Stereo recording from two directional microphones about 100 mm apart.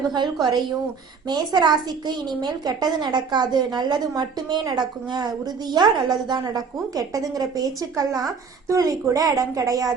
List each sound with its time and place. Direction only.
1.3 s a woman's voice: 45° right (ahead or behind)